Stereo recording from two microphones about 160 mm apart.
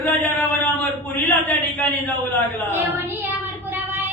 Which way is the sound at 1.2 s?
10° left (ahead or behind).